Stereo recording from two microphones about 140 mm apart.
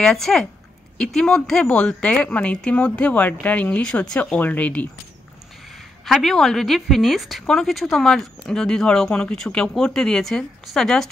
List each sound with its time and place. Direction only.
0.0 s a woman's voice: 5° left (ahead or behind)
6.0 s speech: centre (ahead or behind)